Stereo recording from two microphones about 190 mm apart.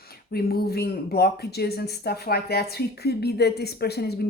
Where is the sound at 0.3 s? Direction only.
55° left (ahead or behind).